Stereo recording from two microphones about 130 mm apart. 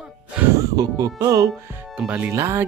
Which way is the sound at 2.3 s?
20° right (ahead or behind).